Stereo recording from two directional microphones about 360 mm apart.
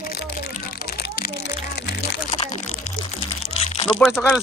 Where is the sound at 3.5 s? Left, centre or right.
Centre.